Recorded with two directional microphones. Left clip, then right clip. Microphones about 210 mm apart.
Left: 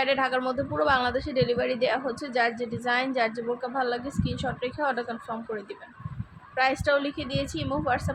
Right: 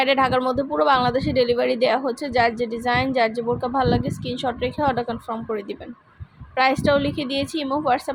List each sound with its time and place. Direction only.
0.0 s speech: 20° right (ahead or behind)
6.6 s speech: 20° right (ahead or behind)